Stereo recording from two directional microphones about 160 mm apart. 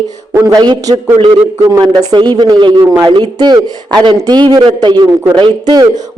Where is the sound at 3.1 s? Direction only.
30° right (ahead or behind).